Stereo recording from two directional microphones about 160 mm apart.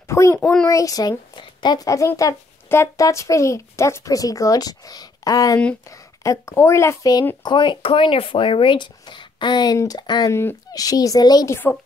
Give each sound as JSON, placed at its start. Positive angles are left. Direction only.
{"t": 0.1, "sound": "a sound", "side_deg": 15}
{"t": 0.4, "sound": "speech", "side_deg": 5}
{"t": 0.7, "sound": "a child's voice", "side_deg": 20}